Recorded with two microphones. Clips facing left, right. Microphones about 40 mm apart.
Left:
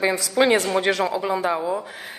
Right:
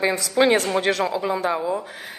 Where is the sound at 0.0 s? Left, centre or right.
Centre.